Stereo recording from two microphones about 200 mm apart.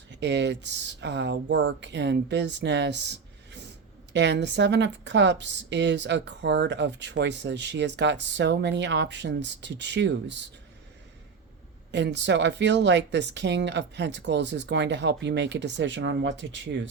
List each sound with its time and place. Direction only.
0.1 s speech: 60° right (ahead or behind)
11.9 s speech: 60° right (ahead or behind)